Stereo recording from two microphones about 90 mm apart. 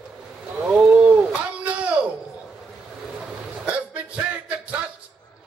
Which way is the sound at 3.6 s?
15° right (ahead or behind).